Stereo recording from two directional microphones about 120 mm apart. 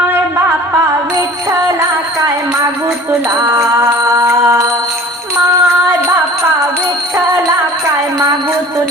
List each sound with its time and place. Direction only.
3.3 s music: 30° right (ahead or behind)